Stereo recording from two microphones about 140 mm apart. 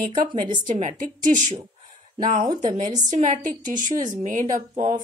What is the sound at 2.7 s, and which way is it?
Speech, 60° right (ahead or behind).